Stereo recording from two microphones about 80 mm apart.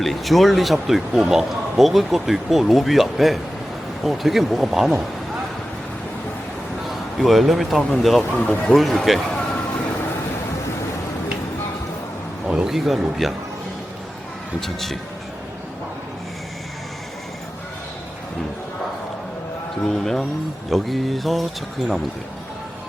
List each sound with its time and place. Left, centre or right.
0.0 s speech: centre
6.8 s speech: centre
8.4 s speech: centre
8.7 s speech: centre
12.5 s speech: centre
14.6 s speech: centre
19.8 s speech: centre